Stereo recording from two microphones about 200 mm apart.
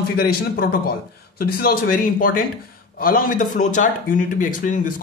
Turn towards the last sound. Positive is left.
turn(degrees=40)  # may be behind; listen again after turning